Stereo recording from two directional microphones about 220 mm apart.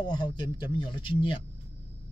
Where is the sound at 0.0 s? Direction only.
20° left (ahead or behind).